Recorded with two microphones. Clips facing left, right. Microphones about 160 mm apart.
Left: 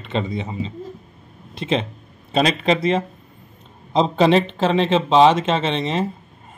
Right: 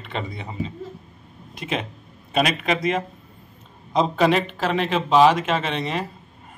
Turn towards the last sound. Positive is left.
turn(degrees=25)  # may be behind; listen again after turning